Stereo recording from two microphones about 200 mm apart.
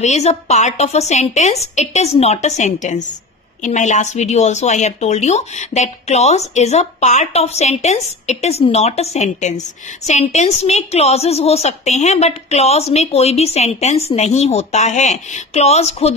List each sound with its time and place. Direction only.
0.0 s speech: 35° left (ahead or behind)